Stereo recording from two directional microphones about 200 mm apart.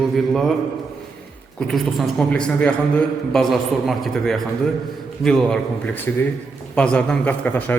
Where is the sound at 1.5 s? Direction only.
Centre (ahead or behind).